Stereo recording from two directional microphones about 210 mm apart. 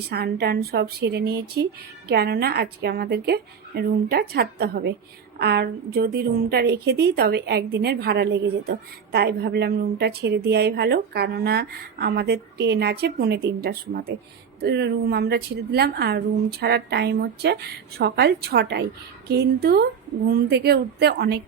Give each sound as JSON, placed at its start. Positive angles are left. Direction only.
{"t": 0.1, "sound": "a woman's voice", "side_deg": -50}